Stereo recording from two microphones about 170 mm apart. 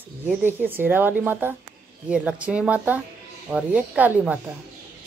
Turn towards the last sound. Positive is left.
turn(degrees=-10)  # may be behind; listen again after turning